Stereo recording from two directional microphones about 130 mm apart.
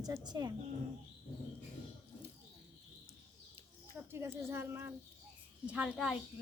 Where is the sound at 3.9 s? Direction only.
15° right (ahead or behind).